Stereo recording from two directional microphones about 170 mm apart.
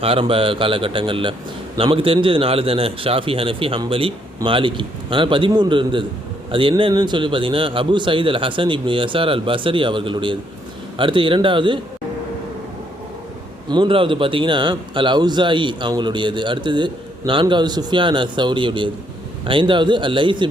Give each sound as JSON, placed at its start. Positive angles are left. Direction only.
{"t": 0.0, "sound": "a man's voice", "side_deg": -35}
{"t": 13.7, "sound": "a man's voice", "side_deg": -30}